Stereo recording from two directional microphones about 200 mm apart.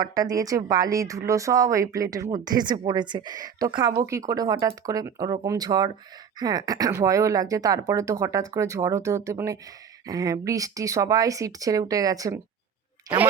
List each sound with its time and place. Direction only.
0.0 s speech: 20° right (ahead or behind)